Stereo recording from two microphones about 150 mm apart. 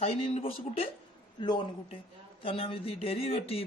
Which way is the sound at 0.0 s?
40° left (ahead or behind).